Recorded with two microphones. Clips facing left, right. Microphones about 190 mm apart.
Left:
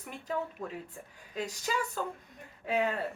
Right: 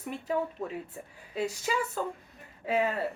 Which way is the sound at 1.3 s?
5° right (ahead or behind).